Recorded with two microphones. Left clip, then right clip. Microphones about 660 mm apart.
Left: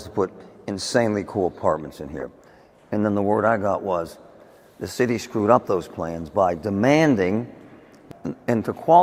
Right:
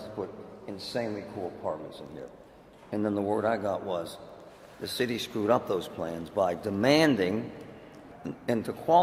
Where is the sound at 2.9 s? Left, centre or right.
Left.